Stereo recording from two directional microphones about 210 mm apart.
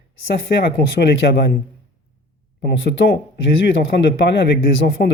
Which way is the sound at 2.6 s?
55° left (ahead or behind).